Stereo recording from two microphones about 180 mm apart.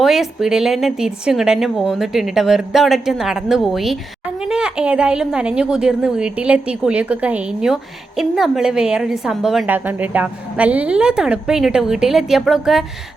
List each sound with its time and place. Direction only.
0.0 s a woman's voice: centre (ahead or behind)